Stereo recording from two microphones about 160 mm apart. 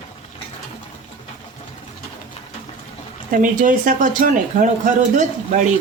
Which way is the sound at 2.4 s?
40° left (ahead or behind).